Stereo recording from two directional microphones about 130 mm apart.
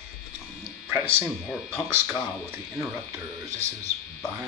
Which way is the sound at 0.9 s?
20° right (ahead or behind).